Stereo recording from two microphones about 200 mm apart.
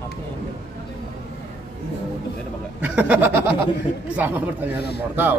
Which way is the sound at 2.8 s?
5° right (ahead or behind).